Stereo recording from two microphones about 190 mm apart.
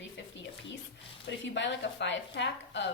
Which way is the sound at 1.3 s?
70° left (ahead or behind).